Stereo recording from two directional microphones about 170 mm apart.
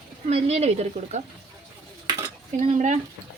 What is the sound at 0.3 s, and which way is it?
Speech, 40° right (ahead or behind).